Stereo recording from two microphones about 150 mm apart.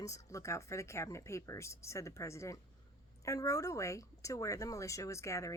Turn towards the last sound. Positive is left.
turn(degrees=20)  # may be behind; listen again after turning